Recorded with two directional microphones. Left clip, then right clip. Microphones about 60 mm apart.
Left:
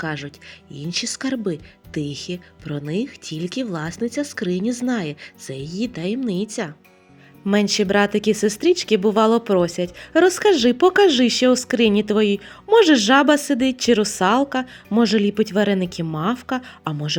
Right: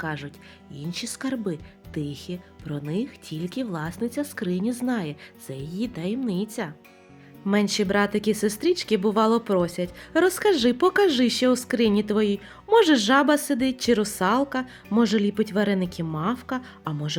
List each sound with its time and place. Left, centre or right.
0.0 s speech: centre
7.5 s speech: left